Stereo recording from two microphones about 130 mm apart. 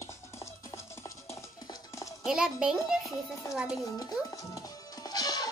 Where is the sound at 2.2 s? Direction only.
5° right (ahead or behind).